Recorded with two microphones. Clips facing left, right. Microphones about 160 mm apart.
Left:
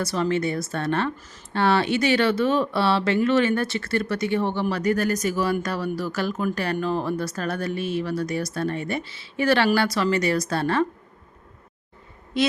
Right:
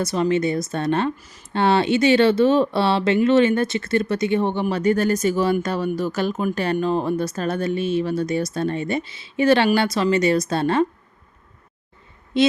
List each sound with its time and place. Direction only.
0.0 s speech: 20° right (ahead or behind)
12.3 s speech: 25° right (ahead or behind)